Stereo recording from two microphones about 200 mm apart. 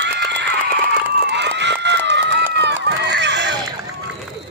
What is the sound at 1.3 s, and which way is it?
Run, 60° right (ahead or behind).